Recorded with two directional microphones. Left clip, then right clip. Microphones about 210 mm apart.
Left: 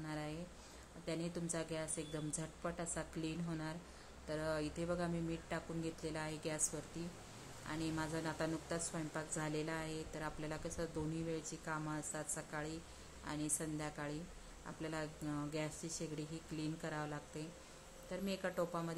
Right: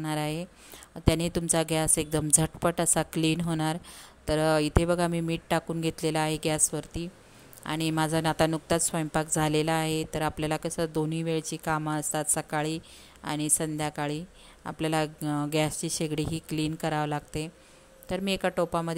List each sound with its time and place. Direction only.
0.0 s a woman's voice: 45° right (ahead or behind)